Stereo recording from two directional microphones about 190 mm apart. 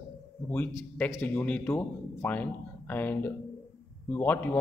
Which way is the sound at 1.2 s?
10° left (ahead or behind).